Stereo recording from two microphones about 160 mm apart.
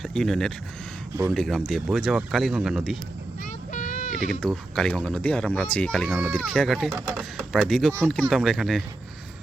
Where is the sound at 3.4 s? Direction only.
55° left (ahead or behind).